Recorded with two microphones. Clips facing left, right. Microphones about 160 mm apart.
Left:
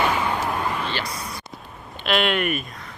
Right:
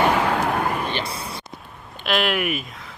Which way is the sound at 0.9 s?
25° right (ahead or behind).